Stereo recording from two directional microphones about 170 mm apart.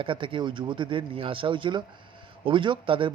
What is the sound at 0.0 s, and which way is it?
Speech, 30° right (ahead or behind).